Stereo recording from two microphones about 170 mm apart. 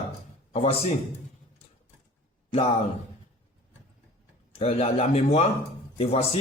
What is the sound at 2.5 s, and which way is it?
Speech, 35° left (ahead or behind).